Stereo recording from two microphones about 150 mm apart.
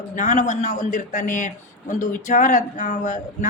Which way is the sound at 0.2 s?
55° left (ahead or behind).